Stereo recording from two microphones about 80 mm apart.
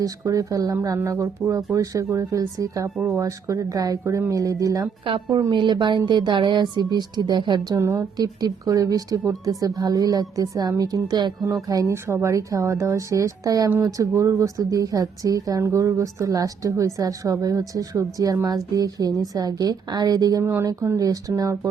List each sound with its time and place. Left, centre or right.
0.0 s a woman's voice: right
5.0 s a woman's voice: right
5.5 s speech: right
7.8 s a woman's voice: right
8.2 s a woman's voice: right
13.7 s a woman's voice: right
13.9 s a woman's voice: right
20.4 s speech: right
20.8 s a woman's voice: right